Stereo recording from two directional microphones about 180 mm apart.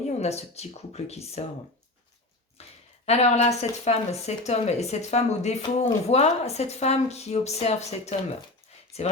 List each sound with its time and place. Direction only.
0.0 s speech: 35° left (ahead or behind)
2.6 s speech: 35° left (ahead or behind)